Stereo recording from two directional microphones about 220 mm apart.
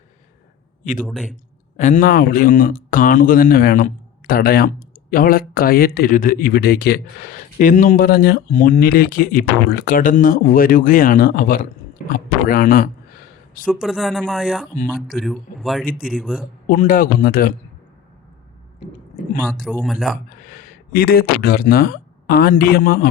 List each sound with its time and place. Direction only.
1.0 s speech: centre (ahead or behind)
1.7 s speech: 35° left (ahead or behind)
13.8 s speech: centre (ahead or behind)
16.6 s speech: 40° left (ahead or behind)
19.8 s speech: centre (ahead or behind)
20.5 s speech: 40° left (ahead or behind)